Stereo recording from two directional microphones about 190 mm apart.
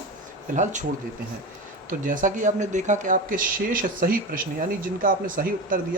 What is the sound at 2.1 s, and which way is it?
Speech, 45° right (ahead or behind).